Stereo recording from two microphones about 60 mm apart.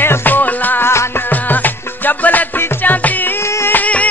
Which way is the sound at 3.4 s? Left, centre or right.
Left.